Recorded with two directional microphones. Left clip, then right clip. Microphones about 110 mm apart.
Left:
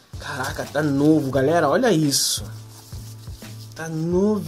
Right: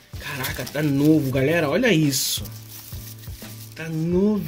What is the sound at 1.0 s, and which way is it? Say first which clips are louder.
Speech: left 1 dB; 15° left (ahead or behind).